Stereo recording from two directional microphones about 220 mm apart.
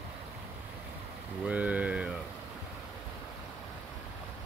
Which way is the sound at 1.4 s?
5° right (ahead or behind).